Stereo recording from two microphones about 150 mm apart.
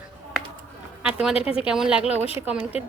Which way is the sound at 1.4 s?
40° left (ahead or behind).